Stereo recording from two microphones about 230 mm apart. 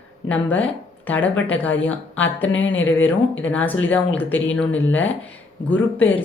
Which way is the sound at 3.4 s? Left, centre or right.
Centre.